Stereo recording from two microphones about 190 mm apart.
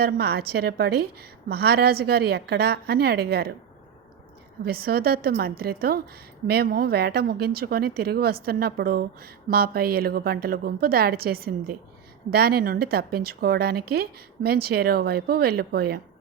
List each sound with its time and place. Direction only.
0.0 s a woman's voice: 55° right (ahead or behind)
4.6 s a woman's voice: 55° right (ahead or behind)